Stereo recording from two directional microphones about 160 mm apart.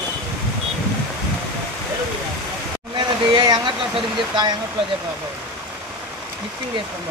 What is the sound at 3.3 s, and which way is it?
Speech, 30° right (ahead or behind).